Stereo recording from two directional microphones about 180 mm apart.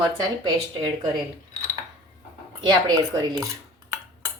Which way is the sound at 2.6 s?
20° right (ahead or behind).